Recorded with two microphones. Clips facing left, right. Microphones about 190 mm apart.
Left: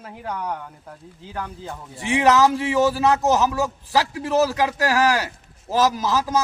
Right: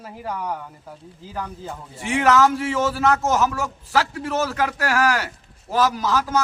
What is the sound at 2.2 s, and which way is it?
A man's voice, 15° left (ahead or behind).